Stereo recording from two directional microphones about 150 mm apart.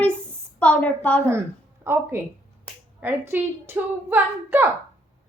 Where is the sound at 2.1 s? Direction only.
15° right (ahead or behind).